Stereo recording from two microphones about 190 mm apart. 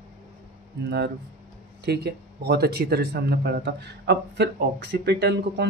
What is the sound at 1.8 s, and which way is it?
Speech, 60° right (ahead or behind).